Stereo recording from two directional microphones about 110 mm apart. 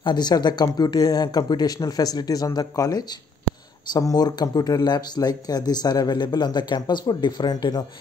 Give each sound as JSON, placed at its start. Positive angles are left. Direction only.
{"t": 0.0, "sound": "speech", "side_deg": 40}